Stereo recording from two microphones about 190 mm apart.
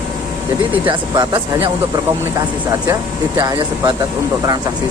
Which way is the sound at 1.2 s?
25° right (ahead or behind).